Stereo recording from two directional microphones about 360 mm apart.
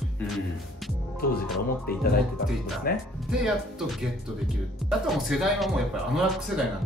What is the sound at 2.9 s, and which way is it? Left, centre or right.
Speech, left.